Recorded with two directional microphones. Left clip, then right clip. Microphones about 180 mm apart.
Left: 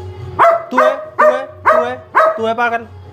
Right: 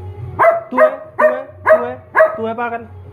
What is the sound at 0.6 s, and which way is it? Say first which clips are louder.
Dog: even; 10° left (ahead or behind).